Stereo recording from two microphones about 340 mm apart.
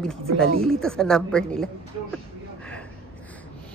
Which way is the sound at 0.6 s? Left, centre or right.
Centre.